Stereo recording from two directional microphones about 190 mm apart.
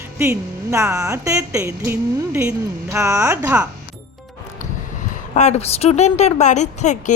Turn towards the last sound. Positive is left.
turn(degrees=40)  # may be behind; listen again after turning